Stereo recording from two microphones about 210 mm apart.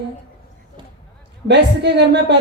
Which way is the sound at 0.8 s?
20° right (ahead or behind).